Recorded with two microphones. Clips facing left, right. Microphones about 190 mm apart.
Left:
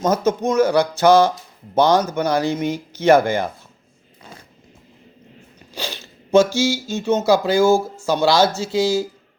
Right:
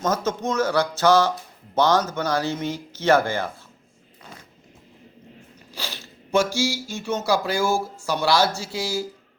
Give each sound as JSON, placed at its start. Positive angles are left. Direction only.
{"t": 0.0, "sound": "speech", "side_deg": 15}
{"t": 5.7, "sound": "speech", "side_deg": 20}